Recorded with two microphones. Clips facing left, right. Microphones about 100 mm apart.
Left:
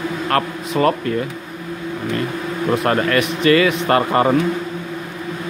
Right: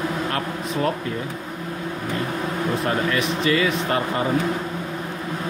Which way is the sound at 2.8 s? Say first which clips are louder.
Left 5 dB; 70° left (ahead or behind).